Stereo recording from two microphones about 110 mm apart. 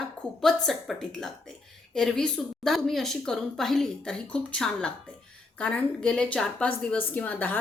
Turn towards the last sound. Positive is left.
turn(degrees=15)  # may be behind; listen again after turning